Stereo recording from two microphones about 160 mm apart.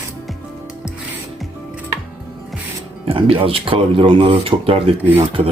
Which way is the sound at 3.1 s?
35° right (ahead or behind).